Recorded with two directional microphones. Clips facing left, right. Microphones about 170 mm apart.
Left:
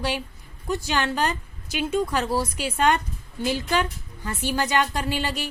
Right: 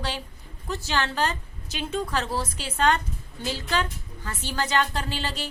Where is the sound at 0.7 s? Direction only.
15° left (ahead or behind).